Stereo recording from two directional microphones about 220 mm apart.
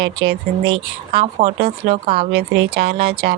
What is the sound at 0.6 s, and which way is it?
Speech, 25° right (ahead or behind).